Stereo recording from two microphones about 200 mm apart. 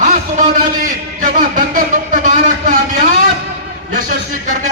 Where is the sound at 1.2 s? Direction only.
40° right (ahead or behind).